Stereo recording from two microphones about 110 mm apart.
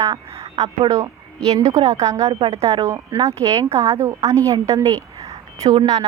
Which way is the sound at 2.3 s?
50° right (ahead or behind).